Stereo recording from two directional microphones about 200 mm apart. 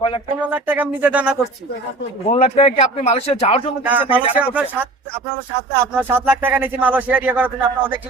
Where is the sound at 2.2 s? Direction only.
35° left (ahead or behind).